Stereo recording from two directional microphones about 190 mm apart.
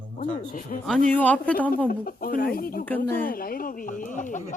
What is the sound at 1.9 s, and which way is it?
Speech, 50° left (ahead or behind).